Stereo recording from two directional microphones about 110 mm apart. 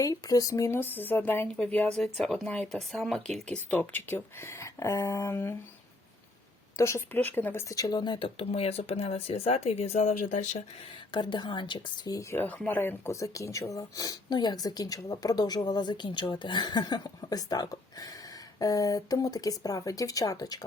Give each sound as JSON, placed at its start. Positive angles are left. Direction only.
{"t": 0.0, "sound": "speech", "side_deg": 30}
{"t": 1.5, "sound": "speech", "side_deg": 10}
{"t": 6.7, "sound": "speech", "side_deg": 25}
{"t": 8.4, "sound": "speech", "side_deg": 65}
{"t": 11.1, "sound": "speech", "side_deg": 45}
{"t": 12.1, "sound": "speech", "side_deg": 25}